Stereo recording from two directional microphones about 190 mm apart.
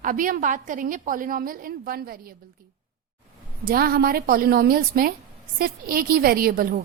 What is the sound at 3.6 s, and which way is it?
A woman's voice, 50° right (ahead or behind).